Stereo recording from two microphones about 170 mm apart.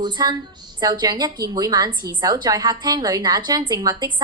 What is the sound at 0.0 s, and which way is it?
A woman's voice, 25° right (ahead or behind).